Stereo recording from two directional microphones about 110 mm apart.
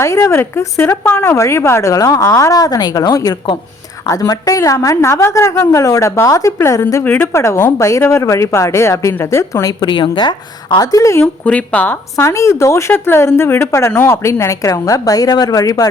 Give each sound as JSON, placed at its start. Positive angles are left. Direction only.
{"t": 0.0, "sound": "speech", "side_deg": 25}
{"t": 4.0, "sound": "a woman's voice", "side_deg": 30}
{"t": 7.0, "sound": "speech", "side_deg": 15}
{"t": 10.8, "sound": "speech", "side_deg": 30}
{"t": 11.2, "sound": "speech", "side_deg": 10}
{"t": 12.1, "sound": "speech", "side_deg": 30}